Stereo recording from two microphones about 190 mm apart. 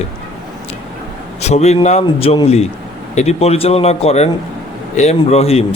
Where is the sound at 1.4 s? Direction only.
35° left (ahead or behind).